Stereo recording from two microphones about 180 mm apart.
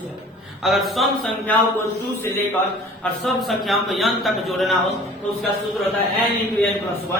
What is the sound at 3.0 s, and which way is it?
A man's voice, centre (ahead or behind).